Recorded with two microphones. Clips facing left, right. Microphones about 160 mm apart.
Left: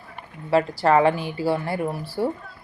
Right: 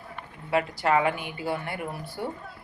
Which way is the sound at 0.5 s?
35° left (ahead or behind).